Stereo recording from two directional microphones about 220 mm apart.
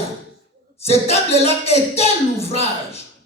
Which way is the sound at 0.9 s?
30° left (ahead or behind).